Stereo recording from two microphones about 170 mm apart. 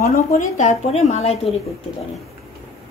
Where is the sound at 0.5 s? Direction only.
40° left (ahead or behind).